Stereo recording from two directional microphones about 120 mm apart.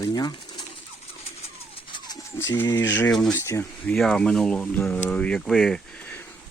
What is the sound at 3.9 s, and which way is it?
Speech, 5° left (ahead or behind).